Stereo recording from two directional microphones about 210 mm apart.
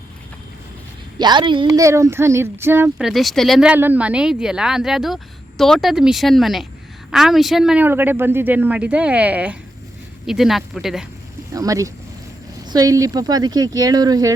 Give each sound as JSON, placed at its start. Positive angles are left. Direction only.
{"t": 1.2, "sound": "speech", "side_deg": -20}
{"t": 11.5, "sound": "speech", "side_deg": -15}